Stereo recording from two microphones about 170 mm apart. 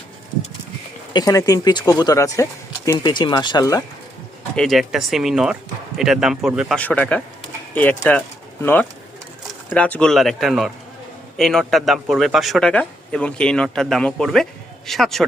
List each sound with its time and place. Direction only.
1.1 s speech: 20° left (ahead or behind)
4.5 s a man's voice: centre (ahead or behind)